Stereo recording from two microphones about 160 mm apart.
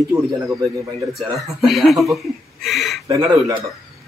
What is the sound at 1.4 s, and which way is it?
Speech, centre (ahead or behind).